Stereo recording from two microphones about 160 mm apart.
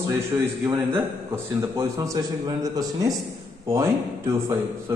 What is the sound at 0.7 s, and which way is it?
A man's voice, 15° right (ahead or behind).